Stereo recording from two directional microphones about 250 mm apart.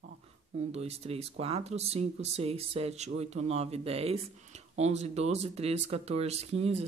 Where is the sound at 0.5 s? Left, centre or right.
Right.